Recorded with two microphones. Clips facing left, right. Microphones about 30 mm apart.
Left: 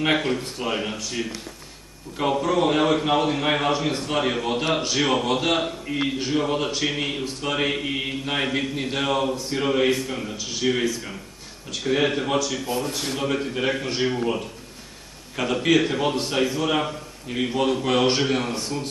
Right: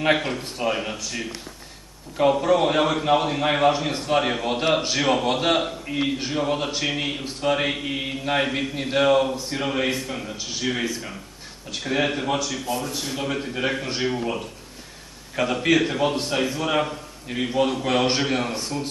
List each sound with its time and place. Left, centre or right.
0.0 s mantra: centre
2.1 s mantra: centre
5.2 s a man's voice: centre
5.6 s a man's voice: centre
6.1 s mantra: centre
11.9 s mantra: centre
12.7 s speech: left
13.2 s mantra: centre